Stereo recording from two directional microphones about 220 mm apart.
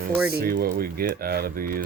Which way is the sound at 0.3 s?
45° right (ahead or behind).